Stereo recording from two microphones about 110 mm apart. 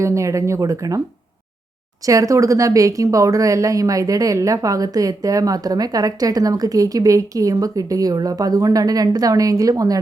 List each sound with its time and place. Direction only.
0.0 s speech: 25° right (ahead or behind)
2.0 s a woman's voice: 30° right (ahead or behind)